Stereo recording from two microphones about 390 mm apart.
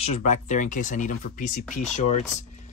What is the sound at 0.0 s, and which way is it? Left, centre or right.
Speech, centre.